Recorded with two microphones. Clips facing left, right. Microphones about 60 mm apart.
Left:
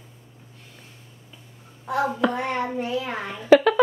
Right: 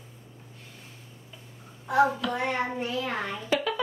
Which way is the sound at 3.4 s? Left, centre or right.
Left.